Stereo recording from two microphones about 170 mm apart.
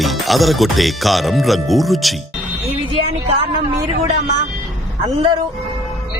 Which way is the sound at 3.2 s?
30° right (ahead or behind).